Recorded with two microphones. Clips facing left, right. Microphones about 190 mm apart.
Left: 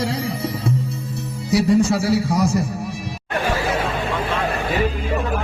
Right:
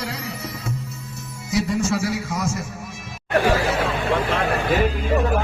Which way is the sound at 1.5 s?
35° left (ahead or behind).